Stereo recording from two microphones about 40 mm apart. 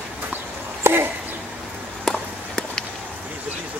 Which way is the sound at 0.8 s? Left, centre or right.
Right.